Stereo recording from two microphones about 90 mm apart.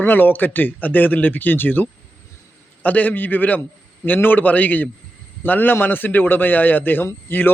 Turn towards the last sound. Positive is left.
turn(degrees=25)  # may be behind; listen again after turning